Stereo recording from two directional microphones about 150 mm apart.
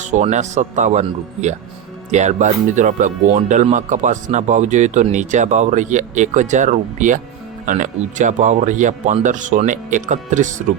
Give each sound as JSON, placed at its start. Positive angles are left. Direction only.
{"t": 0.0, "sound": "speech", "side_deg": -50}